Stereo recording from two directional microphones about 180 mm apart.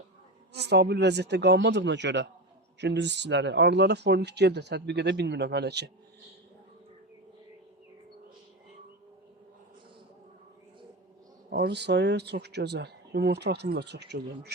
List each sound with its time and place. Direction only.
0.5 s speech: 65° right (ahead or behind)
11.5 s speech: 65° right (ahead or behind)